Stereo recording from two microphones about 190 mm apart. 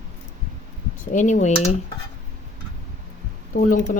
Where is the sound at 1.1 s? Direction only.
40° left (ahead or behind).